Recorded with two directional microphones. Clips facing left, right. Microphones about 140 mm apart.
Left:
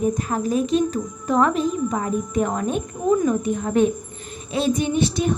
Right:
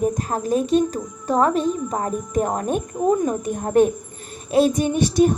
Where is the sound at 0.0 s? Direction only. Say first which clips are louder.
Even; 40° right (ahead or behind).